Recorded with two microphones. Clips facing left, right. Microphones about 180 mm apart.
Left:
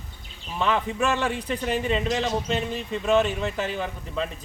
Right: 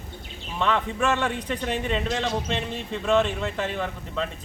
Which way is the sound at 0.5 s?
5° left (ahead or behind).